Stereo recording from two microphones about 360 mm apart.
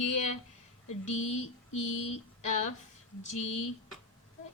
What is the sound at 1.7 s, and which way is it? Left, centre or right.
Speech, left.